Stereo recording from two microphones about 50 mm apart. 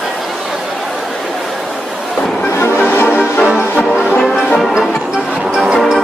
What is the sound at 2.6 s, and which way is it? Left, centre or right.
Music, left.